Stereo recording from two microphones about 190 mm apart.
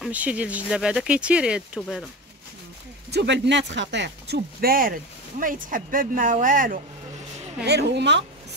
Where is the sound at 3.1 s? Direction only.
65° right (ahead or behind); by 6.8 s 45° right (ahead or behind).